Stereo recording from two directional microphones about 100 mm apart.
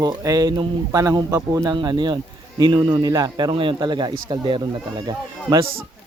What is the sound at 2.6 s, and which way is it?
Speech, 55° right (ahead or behind).